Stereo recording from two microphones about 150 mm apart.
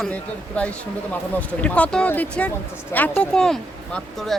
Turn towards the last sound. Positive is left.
turn(degrees=0)  # may be behind; listen again after turning